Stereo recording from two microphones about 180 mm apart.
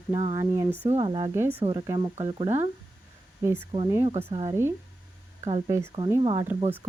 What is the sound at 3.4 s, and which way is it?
Speech, 15° right (ahead or behind).